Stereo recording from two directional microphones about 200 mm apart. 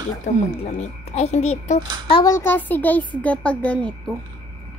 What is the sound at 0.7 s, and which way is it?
Speech, 35° left (ahead or behind).